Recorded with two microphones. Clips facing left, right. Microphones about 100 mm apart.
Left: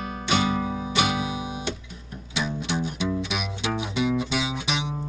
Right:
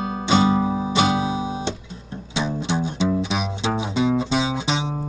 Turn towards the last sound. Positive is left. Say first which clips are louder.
# right 4 dB
turn(degrees=-30)  # may be behind; listen again after turning